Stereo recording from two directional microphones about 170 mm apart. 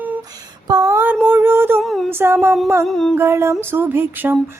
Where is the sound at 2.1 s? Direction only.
10° right (ahead or behind).